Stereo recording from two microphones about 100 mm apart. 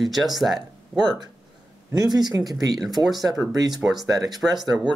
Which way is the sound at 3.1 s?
Centre (ahead or behind).